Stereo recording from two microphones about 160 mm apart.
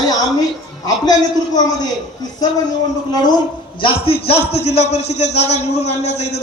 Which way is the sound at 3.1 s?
25° left (ahead or behind).